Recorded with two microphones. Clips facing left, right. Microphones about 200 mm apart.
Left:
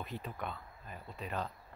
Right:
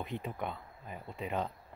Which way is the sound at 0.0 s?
20° right (ahead or behind).